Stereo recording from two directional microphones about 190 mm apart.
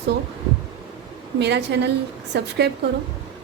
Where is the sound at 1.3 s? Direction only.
65° right (ahead or behind).